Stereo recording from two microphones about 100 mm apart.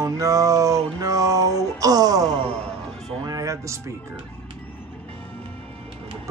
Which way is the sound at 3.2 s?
35° right (ahead or behind).